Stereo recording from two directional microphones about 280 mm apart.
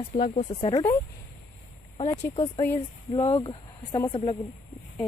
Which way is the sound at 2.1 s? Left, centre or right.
Centre.